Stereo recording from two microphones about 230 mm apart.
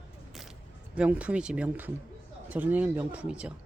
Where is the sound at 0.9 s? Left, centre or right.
Centre.